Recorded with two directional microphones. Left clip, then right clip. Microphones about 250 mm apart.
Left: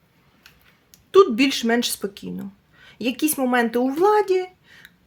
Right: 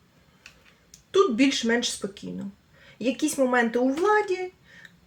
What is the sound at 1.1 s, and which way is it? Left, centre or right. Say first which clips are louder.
Speech: left 6 dB; left.